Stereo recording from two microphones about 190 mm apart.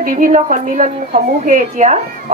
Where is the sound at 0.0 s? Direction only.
45° right (ahead or behind).